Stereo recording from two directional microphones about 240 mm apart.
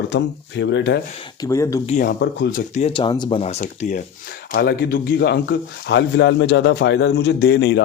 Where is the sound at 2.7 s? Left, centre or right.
Left.